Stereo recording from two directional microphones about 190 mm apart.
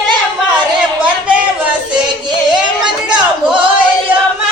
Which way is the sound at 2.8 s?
5° right (ahead or behind).